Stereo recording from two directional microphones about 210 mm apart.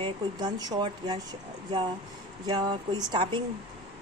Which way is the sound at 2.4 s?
20° right (ahead or behind).